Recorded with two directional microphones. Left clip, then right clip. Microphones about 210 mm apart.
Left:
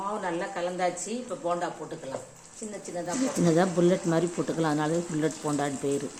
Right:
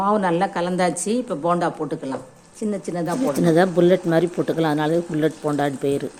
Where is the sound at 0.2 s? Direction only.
50° right (ahead or behind).